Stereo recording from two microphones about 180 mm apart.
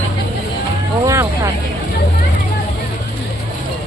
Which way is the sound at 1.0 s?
15° right (ahead or behind).